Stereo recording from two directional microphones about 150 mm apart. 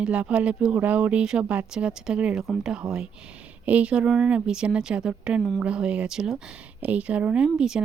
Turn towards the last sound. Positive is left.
turn(degrees=-5)  # may be behind; listen again after turning